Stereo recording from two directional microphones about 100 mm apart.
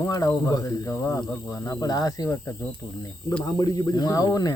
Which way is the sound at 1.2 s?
15° left (ahead or behind).